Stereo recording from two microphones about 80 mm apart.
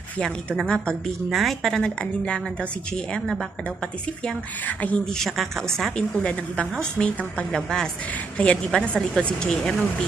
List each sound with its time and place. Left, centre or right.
0.2 s a woman's voice: centre
4.6 s speech: centre
5.0 s a woman's voice: centre